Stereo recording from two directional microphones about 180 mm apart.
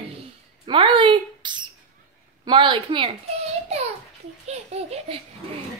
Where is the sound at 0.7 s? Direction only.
25° right (ahead or behind).